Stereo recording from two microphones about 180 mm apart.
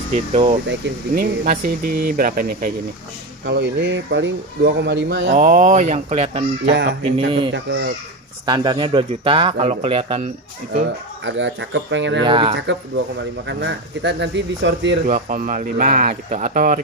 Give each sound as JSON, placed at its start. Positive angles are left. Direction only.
{"t": 0.3, "sound": "speech", "side_deg": -35}
{"t": 0.7, "sound": "speech", "side_deg": -60}
{"t": 3.4, "sound": "speech", "side_deg": -70}
{"t": 5.3, "sound": "speech", "side_deg": -45}
{"t": 6.7, "sound": "speech", "side_deg": -75}
{"t": 7.2, "sound": "speech", "side_deg": -25}
{"t": 11.2, "sound": "speech", "side_deg": -90}
{"t": 12.3, "sound": "speech", "side_deg": -30}
{"t": 12.5, "sound": "speech", "side_deg": -85}
{"t": 15.0, "sound": "speech", "side_deg": -45}